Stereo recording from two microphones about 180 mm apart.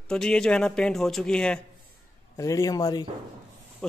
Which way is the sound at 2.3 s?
20° left (ahead or behind).